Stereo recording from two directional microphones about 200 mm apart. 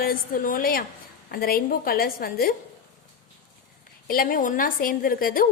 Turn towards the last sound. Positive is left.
turn(degrees=45)  # may be behind; listen again after turning